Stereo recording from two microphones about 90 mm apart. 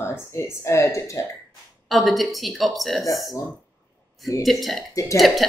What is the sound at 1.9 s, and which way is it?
A woman's voice, centre (ahead or behind).